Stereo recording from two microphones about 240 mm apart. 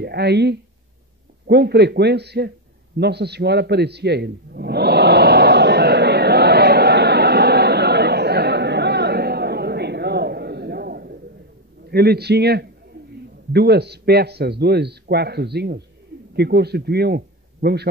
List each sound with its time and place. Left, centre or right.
0.0 s a man's voice: right
3.0 s a sound: right
11.9 s a man's voice: right